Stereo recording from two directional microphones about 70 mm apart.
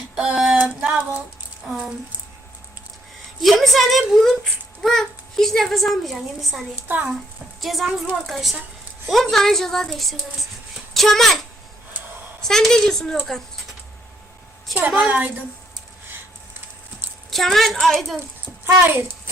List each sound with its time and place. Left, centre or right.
0.2 s female singing: centre
3.4 s a woman's voice: centre
6.8 s a woman's voice: right
7.6 s a woman's voice: centre
14.8 s a woman's voice: centre
17.3 s a woman's voice: centre
18.6 s a child's voice: right